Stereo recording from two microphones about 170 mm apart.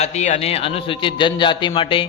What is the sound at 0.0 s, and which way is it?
A man's voice, 40° left (ahead or behind).